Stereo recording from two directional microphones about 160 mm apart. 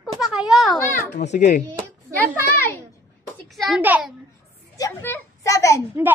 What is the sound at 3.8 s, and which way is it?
Speech, 10° right (ahead or behind).